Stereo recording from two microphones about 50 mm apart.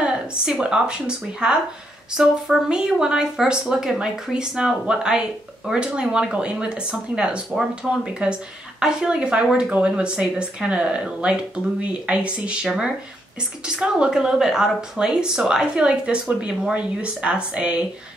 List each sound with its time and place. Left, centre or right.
0.0 s speech: centre
2.1 s speech: centre; by 12.5 s right
13.7 s speech: centre